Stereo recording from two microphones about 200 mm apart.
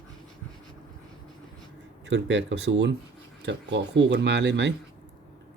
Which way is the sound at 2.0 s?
65° right (ahead or behind).